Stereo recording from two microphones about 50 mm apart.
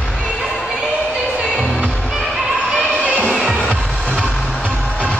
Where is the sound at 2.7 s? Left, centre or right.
Right.